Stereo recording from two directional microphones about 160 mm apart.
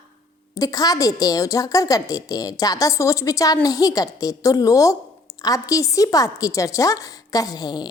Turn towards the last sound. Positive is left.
turn(degrees=25)  # may be behind; listen again after turning